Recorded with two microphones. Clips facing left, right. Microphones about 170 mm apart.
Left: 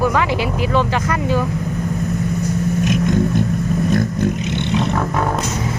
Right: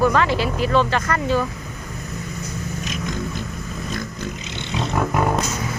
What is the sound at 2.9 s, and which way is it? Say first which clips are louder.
Vehicle: left 11 dB; 55° left (ahead or behind).